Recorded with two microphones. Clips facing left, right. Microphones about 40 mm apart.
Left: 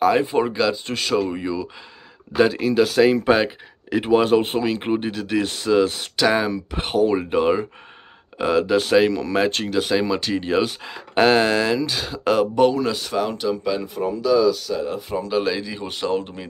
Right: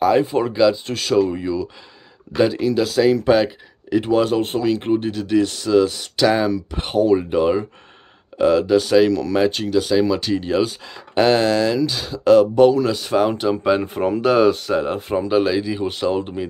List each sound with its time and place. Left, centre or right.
0.0 s speech: centre
5.4 s speech: left
6.2 s speech: centre
13.1 s speech: right
13.7 s speech: right
14.7 s speech: right
15.4 s speech: centre